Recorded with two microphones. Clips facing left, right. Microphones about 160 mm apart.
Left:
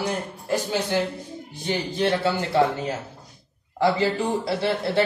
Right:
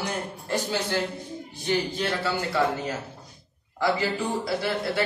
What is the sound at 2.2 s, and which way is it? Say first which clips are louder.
A man's voice: left 4 dB; 25° left (ahead or behind).